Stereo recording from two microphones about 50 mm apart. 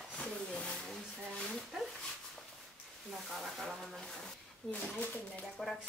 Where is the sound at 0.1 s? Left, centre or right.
Left.